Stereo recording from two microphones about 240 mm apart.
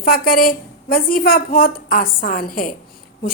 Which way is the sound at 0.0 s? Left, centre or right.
Left.